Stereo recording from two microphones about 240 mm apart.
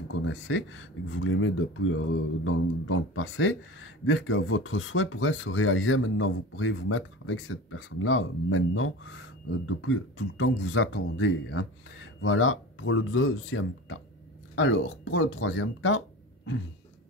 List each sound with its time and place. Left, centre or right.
0.1 s speech: left